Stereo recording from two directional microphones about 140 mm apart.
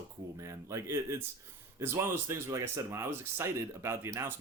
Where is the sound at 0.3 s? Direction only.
20° right (ahead or behind).